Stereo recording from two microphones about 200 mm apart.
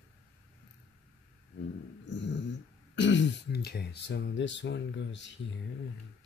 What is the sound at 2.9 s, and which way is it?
Speech, 65° left (ahead or behind).